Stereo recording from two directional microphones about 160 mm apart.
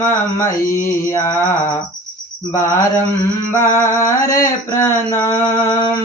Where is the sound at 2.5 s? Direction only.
20° left (ahead or behind).